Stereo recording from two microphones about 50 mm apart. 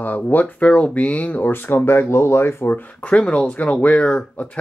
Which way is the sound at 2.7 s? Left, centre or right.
Left.